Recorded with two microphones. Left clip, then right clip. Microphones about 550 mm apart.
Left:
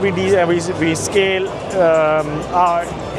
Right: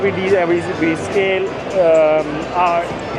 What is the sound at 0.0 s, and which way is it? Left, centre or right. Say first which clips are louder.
Speech: even; left.